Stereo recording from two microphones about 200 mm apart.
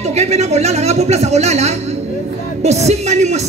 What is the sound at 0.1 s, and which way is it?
Speech, 35° right (ahead or behind).